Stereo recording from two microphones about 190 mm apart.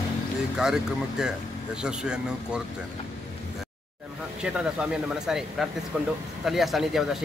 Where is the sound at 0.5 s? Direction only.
5° right (ahead or behind).